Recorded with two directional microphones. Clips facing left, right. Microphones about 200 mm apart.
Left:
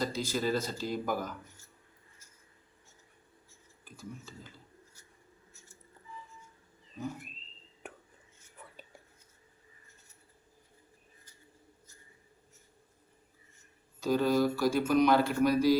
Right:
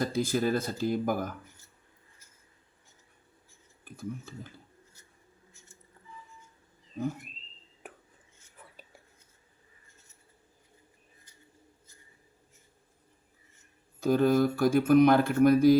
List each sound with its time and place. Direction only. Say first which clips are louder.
0.0 s speech: right 4 dB; 55° right (ahead or behind)
3.8 s speech: right 7 dB; 55° right (ahead or behind)
7.8 s whispering: left 1 dB; centre (ahead or behind)
14.0 s speech: right 3 dB; 50° right (ahead or behind)